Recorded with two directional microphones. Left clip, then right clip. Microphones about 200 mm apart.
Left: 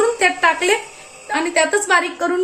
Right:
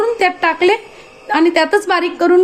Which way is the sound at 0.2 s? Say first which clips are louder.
Right 2 dB; 40° right (ahead or behind).